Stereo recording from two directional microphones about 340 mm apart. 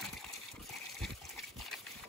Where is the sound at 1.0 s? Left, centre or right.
Centre.